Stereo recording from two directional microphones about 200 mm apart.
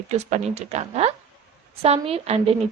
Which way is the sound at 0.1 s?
35° right (ahead or behind).